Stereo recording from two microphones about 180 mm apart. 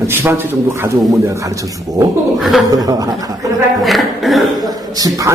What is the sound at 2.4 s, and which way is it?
Speech, centre (ahead or behind).